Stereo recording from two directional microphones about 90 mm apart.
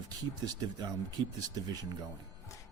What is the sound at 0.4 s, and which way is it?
Speech, 45° right (ahead or behind).